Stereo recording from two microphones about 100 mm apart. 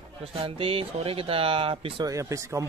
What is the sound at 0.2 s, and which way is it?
Speech, 70° right (ahead or behind).